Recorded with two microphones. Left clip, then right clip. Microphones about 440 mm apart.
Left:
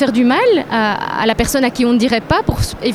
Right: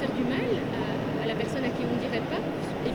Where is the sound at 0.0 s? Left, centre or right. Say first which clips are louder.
Left 16 dB; left.